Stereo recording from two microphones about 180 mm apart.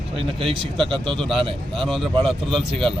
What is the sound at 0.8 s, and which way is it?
Speech, 30° right (ahead or behind).